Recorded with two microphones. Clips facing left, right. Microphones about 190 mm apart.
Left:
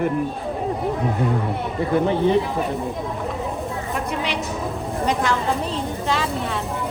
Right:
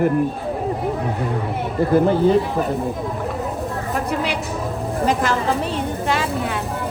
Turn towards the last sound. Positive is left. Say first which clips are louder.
# right 2 dB
turn(degrees=0)  # may be behind; listen again after turning